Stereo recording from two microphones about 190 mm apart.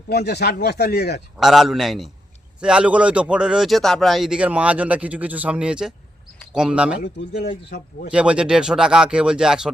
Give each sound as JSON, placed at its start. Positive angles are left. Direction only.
{"t": 0.1, "sound": "speech", "side_deg": 60}
{"t": 1.4, "sound": "speech", "side_deg": 0}
{"t": 7.0, "sound": "speech", "side_deg": 60}
{"t": 8.1, "sound": "speech", "side_deg": -5}